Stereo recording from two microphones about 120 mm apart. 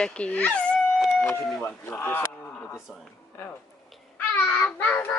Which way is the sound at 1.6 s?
20° left (ahead or behind).